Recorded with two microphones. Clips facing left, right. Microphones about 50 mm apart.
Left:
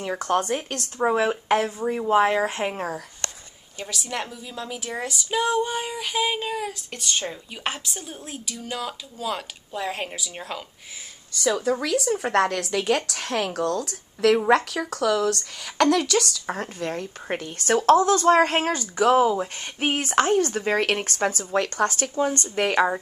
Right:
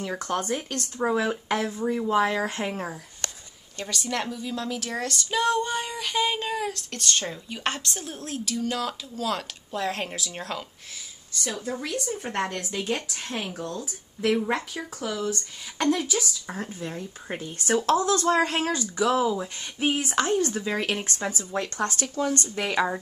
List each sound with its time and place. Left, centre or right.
0.2 s speech: left
3.7 s a woman's voice: centre
11.3 s speech: left
16.4 s speech: left
17.9 s speech: left
22.1 s speech: left